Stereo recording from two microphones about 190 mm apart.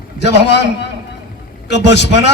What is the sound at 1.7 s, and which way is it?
Speech, 65° left (ahead or behind).